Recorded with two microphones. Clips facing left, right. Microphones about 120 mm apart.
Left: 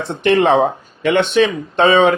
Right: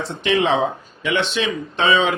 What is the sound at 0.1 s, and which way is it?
Speech, 55° left (ahead or behind).